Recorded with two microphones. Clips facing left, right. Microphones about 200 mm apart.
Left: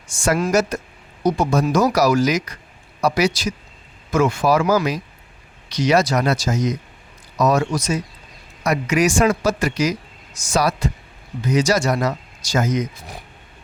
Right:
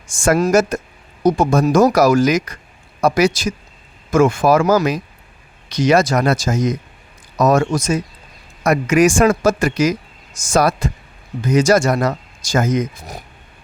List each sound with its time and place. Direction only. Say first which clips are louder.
0.1 s speech: right 4 dB; 50° right (ahead or behind)